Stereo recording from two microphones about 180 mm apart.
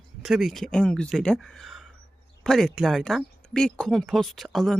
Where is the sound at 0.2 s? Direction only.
Centre (ahead or behind).